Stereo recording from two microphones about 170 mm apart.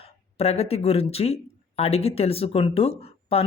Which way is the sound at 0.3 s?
35° left (ahead or behind).